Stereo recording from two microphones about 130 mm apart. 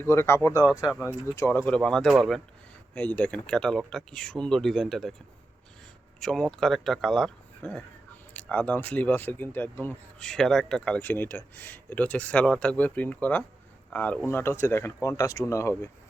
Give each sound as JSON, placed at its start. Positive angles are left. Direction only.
{"t": 0.0, "sound": "speech", "side_deg": 20}
{"t": 0.7, "sound": "speech", "side_deg": -5}
{"t": 1.0, "sound": "speech", "side_deg": 20}
{"t": 2.9, "sound": "speech", "side_deg": 10}
{"t": 6.1, "sound": "speech", "side_deg": 5}